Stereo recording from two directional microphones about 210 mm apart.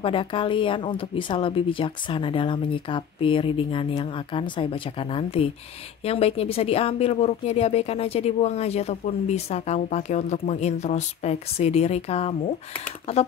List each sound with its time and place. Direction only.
0.0 s speech: 25° left (ahead or behind)